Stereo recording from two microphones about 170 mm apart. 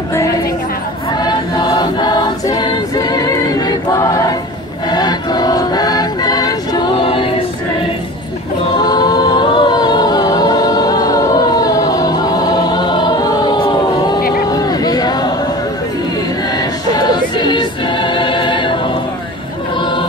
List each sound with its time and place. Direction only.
1.2 s choir: 25° left (ahead or behind)
8.7 s a capella: 25° left (ahead or behind)
14.5 s a sound: 20° left (ahead or behind)
16.9 s choir: 25° left (ahead or behind)